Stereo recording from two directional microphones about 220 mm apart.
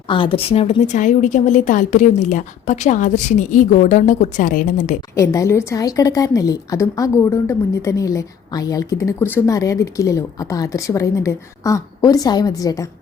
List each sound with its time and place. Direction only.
0.1 s a woman's voice: 25° left (ahead or behind)
5.1 s a woman's voice: 15° left (ahead or behind)